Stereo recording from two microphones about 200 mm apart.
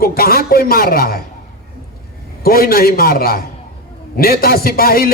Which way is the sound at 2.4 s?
50° left (ahead or behind).